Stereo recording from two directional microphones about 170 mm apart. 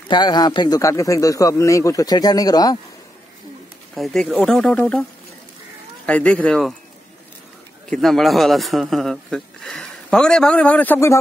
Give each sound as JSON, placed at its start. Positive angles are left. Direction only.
{"t": 0.1, "sound": "a man's voice", "side_deg": 25}
{"t": 3.9, "sound": "a man's voice", "side_deg": 0}
{"t": 6.0, "sound": "speech", "side_deg": 5}
{"t": 7.9, "sound": "a man's voice", "side_deg": 0}